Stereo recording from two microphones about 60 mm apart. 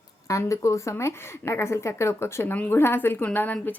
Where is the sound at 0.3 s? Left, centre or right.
Left.